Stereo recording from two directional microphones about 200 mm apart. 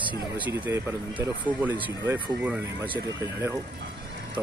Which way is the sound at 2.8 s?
25° right (ahead or behind).